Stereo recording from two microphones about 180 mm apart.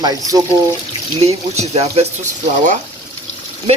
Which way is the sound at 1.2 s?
35° right (ahead or behind).